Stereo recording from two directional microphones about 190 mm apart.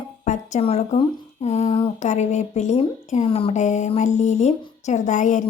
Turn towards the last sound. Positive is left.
turn(degrees=40)  # may be behind; listen again after turning